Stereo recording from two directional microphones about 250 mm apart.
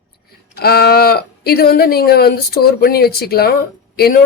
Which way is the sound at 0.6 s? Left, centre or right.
Left.